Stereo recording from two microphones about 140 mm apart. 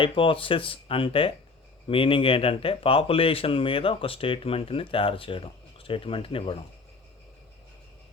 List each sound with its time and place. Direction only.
0.0 s speech: 35° left (ahead or behind)